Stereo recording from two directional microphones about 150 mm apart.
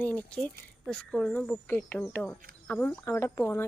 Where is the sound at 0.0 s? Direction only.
10° left (ahead or behind).